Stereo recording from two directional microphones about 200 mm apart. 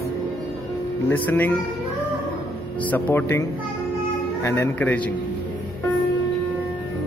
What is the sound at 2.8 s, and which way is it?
Speech, 10° left (ahead or behind).